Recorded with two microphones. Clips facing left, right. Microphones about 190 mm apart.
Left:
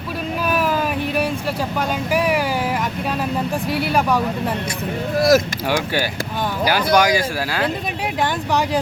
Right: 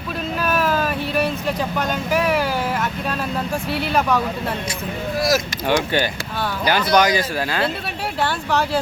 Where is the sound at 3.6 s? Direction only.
10° left (ahead or behind).